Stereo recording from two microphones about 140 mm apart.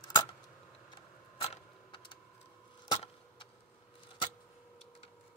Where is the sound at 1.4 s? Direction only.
40° left (ahead or behind).